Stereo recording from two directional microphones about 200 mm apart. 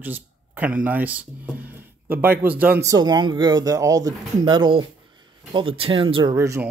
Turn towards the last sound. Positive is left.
turn(degrees=-15)  # may be behind; listen again after turning